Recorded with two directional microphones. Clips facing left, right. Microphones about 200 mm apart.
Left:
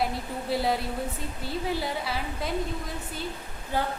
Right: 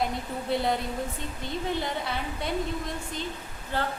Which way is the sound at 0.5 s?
5° left (ahead or behind).